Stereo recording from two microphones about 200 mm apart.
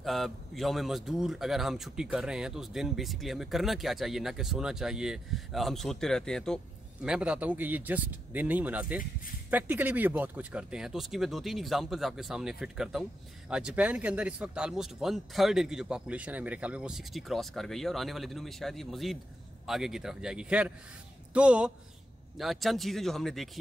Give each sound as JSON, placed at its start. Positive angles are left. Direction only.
{"t": 0.0, "sound": "speech", "side_deg": 0}